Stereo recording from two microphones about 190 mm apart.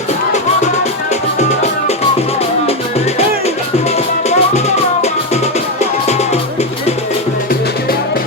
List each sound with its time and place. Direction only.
3.4 s music: 35° left (ahead or behind)
5.8 s music: 35° left (ahead or behind)